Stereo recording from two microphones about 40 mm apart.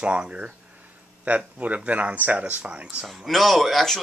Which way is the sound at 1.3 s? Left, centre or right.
Right.